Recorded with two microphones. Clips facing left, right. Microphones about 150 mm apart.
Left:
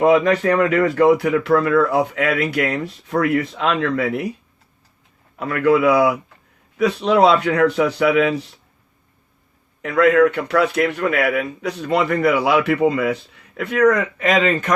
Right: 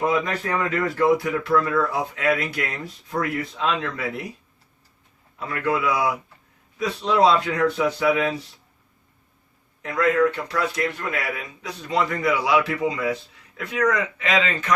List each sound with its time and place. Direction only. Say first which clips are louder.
0.0 s speech: left 9 dB; 70° left (ahead or behind)
5.4 s speech: left 8 dB; 65° left (ahead or behind)
9.8 s speech: left 6 dB; 70° left (ahead or behind); by 14.7 s 50° left (ahead or behind)